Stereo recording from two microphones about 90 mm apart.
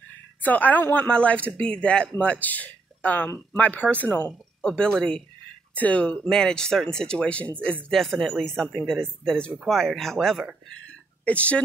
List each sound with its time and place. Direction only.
0.4 s a woman's voice: 20° left (ahead or behind)
4.6 s a woman's voice: 10° left (ahead or behind)
10.7 s a sound: 15° left (ahead or behind)